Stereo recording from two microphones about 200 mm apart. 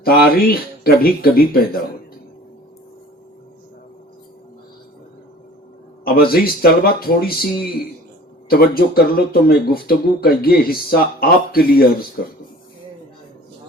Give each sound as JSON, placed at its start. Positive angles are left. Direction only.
{"t": 0.0, "sound": "speech", "side_deg": 50}
{"t": 6.1, "sound": "speech", "side_deg": 50}